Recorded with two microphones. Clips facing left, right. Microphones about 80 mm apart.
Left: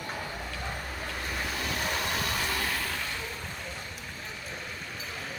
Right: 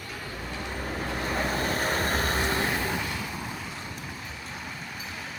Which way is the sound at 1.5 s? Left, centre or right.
Right.